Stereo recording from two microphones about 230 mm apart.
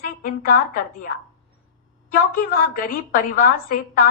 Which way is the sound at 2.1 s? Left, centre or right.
Left.